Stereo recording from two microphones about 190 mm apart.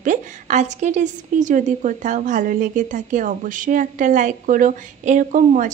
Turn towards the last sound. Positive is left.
turn(degrees=-40)  # may be behind; listen again after turning